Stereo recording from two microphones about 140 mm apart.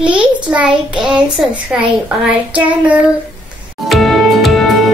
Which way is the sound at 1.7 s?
10° right (ahead or behind).